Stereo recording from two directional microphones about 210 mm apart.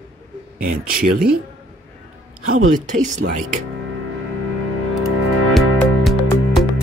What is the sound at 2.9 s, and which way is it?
Speech, 40° right (ahead or behind).